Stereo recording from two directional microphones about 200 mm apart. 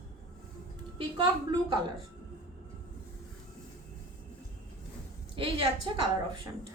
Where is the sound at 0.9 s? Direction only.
25° right (ahead or behind).